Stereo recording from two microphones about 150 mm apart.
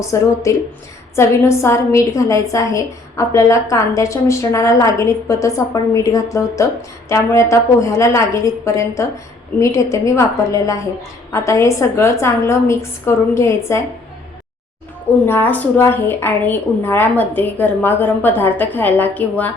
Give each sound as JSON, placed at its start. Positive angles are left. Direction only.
{"t": 0.0, "sound": "a woman's voice", "side_deg": 20}
{"t": 15.3, "sound": "a woman's voice", "side_deg": 10}